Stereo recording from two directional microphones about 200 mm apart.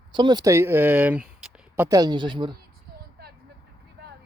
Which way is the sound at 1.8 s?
15° right (ahead or behind).